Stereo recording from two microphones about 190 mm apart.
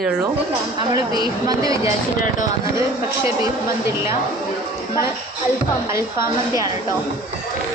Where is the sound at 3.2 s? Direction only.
15° right (ahead or behind).